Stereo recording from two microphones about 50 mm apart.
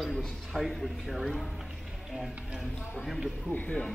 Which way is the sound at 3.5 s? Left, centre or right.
Left.